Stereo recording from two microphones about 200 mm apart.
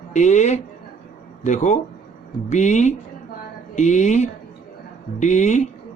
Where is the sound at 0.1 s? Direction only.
35° left (ahead or behind).